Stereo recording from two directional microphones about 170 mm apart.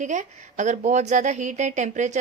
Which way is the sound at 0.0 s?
45° right (ahead or behind).